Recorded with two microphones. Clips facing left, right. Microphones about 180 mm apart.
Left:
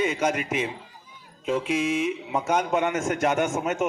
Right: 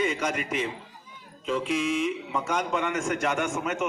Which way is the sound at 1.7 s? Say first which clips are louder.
Even; 45° left (ahead or behind).